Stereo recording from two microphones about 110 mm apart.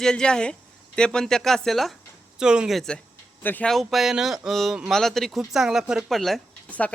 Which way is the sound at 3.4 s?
15° left (ahead or behind).